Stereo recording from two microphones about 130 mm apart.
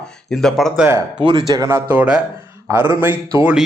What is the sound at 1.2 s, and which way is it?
Speech, 35° right (ahead or behind).